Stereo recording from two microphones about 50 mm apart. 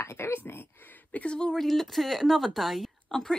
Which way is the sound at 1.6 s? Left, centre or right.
Centre.